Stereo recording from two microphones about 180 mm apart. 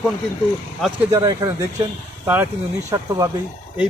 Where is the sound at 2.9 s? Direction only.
15° right (ahead or behind).